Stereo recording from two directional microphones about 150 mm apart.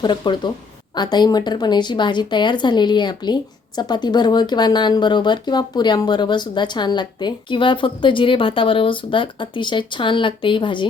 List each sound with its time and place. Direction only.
0.0 s speech: 30° left (ahead or behind)